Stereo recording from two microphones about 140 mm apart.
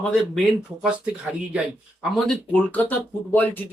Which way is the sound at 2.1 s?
5° left (ahead or behind).